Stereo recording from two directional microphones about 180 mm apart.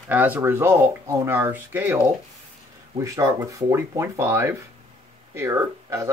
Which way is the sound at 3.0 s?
15° right (ahead or behind).